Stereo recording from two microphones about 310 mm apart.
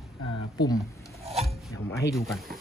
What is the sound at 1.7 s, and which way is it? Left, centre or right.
Speech, centre.